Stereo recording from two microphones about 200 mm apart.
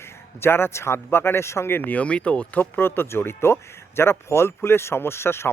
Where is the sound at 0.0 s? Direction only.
10° left (ahead or behind).